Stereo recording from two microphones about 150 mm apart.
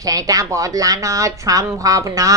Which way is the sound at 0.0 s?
25° right (ahead or behind).